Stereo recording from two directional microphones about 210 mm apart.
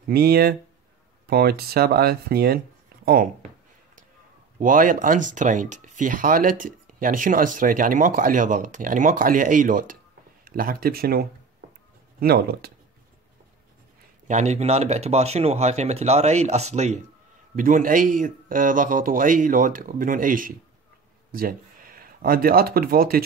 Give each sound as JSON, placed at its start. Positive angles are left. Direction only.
{"t": 0.1, "sound": "speech", "side_deg": -50}
{"t": 4.6, "sound": "speech", "side_deg": -40}
{"t": 14.2, "sound": "speech", "side_deg": -35}